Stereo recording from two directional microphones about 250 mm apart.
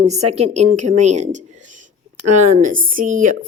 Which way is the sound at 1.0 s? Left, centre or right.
Right.